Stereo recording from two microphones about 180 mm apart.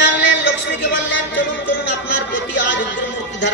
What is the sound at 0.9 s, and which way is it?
Music, 90° left.